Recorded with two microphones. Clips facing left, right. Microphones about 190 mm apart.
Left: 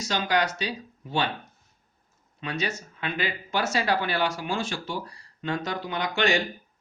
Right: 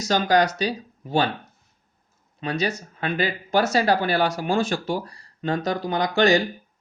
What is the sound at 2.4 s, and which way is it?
Speech, 35° right (ahead or behind).